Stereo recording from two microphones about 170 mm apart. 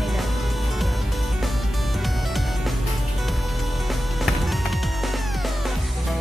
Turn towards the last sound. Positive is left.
turn(degrees=0)  # may be behind; listen again after turning